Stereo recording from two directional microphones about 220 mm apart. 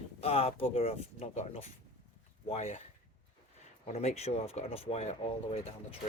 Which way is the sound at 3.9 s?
30° left (ahead or behind).